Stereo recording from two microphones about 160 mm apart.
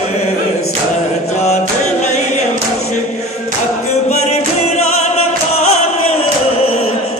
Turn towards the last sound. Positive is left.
turn(degrees=45)  # may be behind; listen again after turning